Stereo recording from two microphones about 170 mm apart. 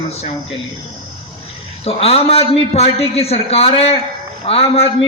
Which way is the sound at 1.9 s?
35° left (ahead or behind).